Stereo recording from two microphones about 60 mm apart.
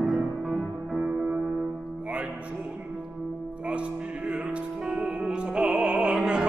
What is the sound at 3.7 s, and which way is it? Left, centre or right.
Music, centre.